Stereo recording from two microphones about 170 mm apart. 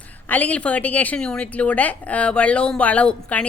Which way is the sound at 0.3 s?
10° left (ahead or behind).